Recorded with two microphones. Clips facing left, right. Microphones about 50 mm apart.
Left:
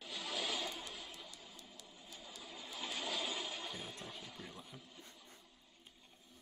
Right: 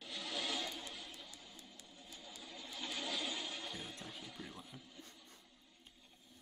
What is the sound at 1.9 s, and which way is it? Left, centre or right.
Train, centre.